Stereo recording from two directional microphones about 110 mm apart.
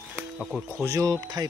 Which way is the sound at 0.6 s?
25° right (ahead or behind).